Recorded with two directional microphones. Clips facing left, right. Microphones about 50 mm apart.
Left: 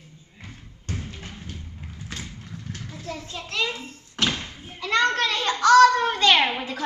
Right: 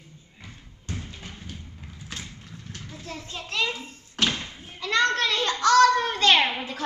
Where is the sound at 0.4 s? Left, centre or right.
Left.